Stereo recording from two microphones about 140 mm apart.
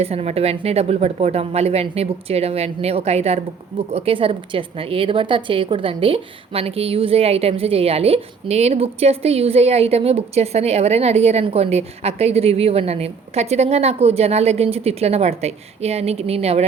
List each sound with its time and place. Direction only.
0.0 s a woman's voice: 45° right (ahead or behind)